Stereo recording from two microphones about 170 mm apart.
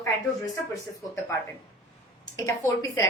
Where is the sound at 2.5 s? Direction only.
20° left (ahead or behind).